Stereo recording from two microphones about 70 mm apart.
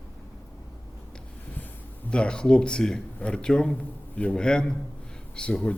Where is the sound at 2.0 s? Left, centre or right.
Centre.